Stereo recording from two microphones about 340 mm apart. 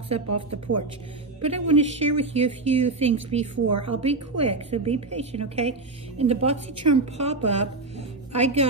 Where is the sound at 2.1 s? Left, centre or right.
Centre.